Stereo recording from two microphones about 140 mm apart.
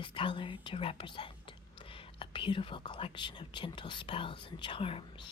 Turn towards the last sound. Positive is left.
turn(degrees=40)  # may be behind; listen again after turning